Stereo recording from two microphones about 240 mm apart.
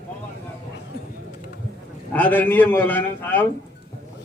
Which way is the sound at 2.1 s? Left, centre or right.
Centre.